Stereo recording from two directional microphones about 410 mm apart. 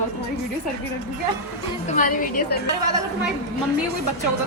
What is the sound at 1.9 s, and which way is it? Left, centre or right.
Speech, centre.